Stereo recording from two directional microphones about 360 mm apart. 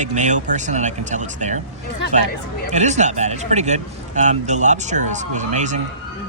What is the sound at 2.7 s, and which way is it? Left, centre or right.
Speech, centre.